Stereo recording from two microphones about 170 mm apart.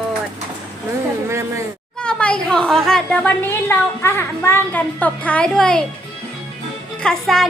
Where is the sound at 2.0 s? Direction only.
5° left (ahead or behind).